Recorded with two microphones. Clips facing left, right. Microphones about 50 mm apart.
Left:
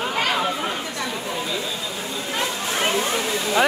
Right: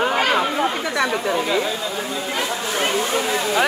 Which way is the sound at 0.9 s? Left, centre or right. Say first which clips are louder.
Right 7 dB; right.